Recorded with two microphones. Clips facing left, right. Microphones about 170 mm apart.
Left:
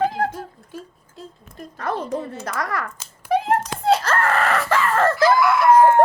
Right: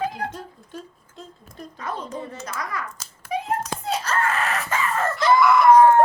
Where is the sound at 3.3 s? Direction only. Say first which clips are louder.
Left 6 dB; 70° left (ahead or behind); by 5.1 s 90° left.